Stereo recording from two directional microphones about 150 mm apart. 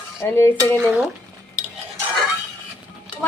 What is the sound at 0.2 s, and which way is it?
Stir, 20° left (ahead or behind).